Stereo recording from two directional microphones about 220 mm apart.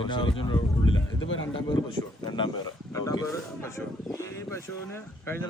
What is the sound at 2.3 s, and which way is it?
Speech, 20° left (ahead or behind).